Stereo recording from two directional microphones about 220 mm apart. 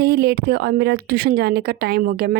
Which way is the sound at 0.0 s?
45° right (ahead or behind).